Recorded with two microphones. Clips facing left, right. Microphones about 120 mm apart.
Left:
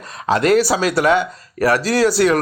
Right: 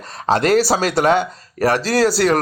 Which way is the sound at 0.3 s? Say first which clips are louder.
Even; 30° right (ahead or behind).